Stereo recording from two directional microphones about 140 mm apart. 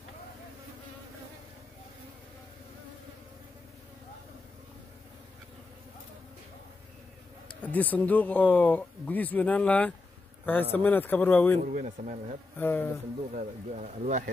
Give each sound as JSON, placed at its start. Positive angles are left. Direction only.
{"t": 7.6, "sound": "speech", "side_deg": 10}
{"t": 11.6, "sound": "speech", "side_deg": -65}
{"t": 12.5, "sound": "speech", "side_deg": 15}
{"t": 13.3, "sound": "speech", "side_deg": -60}